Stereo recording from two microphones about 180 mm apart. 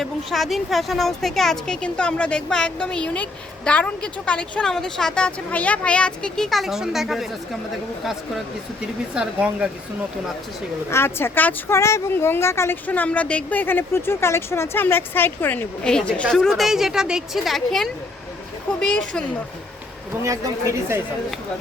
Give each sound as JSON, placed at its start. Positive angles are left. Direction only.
{"t": 0.0, "sound": "a woman's voice", "side_deg": 0}
{"t": 9.1, "sound": "a woman's voice", "side_deg": -5}
{"t": 10.9, "sound": "a woman's voice", "side_deg": 15}
{"t": 20.2, "sound": "speech", "side_deg": -15}